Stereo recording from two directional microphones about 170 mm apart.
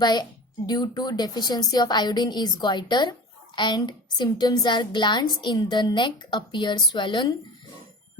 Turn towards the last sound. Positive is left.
turn(degrees=30)  # may be behind; listen again after turning